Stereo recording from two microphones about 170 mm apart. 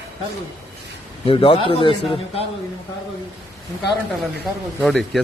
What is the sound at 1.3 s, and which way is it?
Speech, 30° left (ahead or behind).